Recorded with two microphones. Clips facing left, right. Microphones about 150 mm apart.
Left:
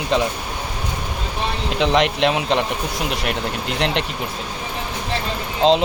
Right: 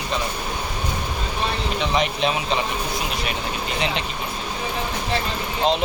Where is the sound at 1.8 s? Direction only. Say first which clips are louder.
Left 6 dB; 90° left; by 4.0 s 75° left (ahead or behind).